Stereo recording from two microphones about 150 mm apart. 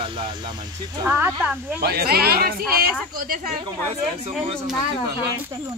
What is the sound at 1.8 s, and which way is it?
Speech, 90° right.